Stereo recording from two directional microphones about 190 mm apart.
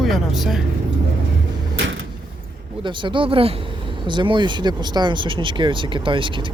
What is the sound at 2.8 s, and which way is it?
Speech, 25° right (ahead or behind).